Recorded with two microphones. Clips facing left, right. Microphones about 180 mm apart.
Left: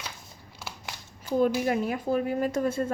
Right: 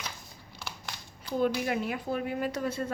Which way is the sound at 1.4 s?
40° left (ahead or behind).